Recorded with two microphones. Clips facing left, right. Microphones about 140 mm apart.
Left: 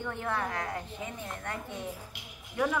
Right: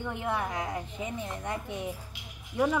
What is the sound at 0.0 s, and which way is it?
A woman's voice, 15° right (ahead or behind).